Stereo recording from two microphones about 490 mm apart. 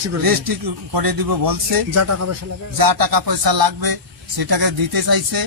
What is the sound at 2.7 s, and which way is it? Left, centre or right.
A man's voice, right.